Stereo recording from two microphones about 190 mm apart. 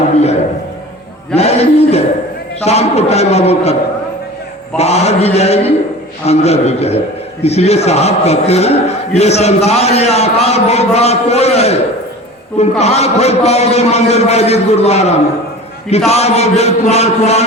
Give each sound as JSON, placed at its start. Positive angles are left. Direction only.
{"t": 1.4, "sound": "a man's voice", "side_deg": 35}
{"t": 4.8, "sound": "a man's voice", "side_deg": 35}
{"t": 12.8, "sound": "a man's voice", "side_deg": 35}